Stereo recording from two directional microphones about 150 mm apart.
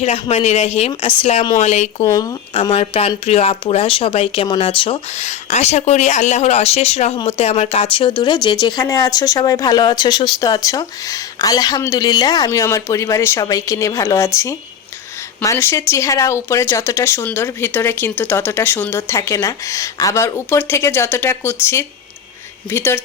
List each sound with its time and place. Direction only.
0.0 s speech: 45° left (ahead or behind)
2.0 s speech: 25° left (ahead or behind)
2.5 s speech: 40° left (ahead or behind); by 14.3 s 20° left (ahead or behind)
15.4 s speech: 15° left (ahead or behind)